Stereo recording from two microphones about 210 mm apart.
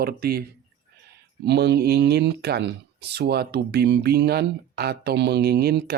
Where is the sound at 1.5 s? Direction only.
55° right (ahead or behind).